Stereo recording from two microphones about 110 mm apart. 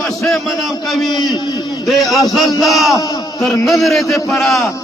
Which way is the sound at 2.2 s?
35° left (ahead or behind).